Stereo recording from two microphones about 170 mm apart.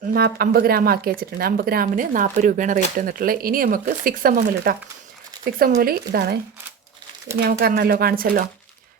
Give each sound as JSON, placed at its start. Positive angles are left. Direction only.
{"t": 0.1, "sound": "speech", "side_deg": -65}